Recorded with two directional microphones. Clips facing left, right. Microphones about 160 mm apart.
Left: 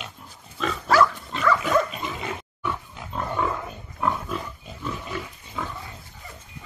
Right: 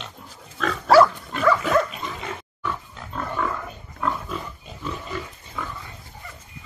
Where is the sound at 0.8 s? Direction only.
35° right (ahead or behind).